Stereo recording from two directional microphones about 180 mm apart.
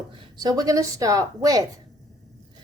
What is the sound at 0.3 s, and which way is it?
A woman's voice, 20° right (ahead or behind).